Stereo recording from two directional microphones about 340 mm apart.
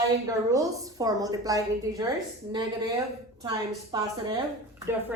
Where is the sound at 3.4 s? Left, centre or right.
Centre.